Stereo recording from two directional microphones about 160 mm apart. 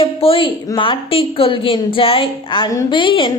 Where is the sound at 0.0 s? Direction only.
35° left (ahead or behind).